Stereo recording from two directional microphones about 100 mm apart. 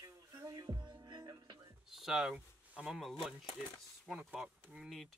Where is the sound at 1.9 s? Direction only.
5° right (ahead or behind).